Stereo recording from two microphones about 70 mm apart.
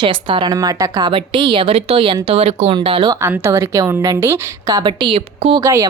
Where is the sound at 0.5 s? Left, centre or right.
Right.